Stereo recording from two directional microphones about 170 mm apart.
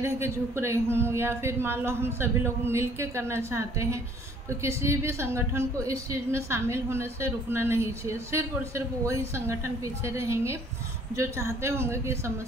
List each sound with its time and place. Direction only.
0.0 s a woman's voice: 15° right (ahead or behind)